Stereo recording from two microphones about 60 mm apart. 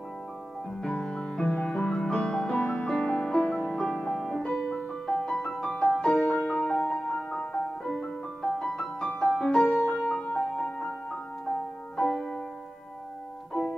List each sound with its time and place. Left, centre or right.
0.8 s music: centre
4.1 s music: centre
4.4 s music: left
6.5 s music: left
8.5 s music: centre
9.7 s music: left
10.5 s music: centre
12.0 s music: centre
13.5 s music: centre